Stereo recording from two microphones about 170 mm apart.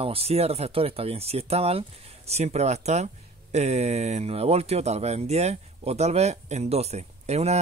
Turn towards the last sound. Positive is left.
turn(degrees=-40)  # may be behind; listen again after turning